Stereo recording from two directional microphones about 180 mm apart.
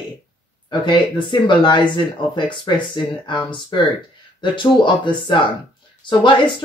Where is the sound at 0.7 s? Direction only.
25° left (ahead or behind).